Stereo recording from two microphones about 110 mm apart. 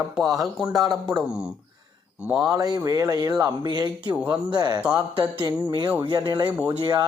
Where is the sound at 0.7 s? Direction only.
35° right (ahead or behind).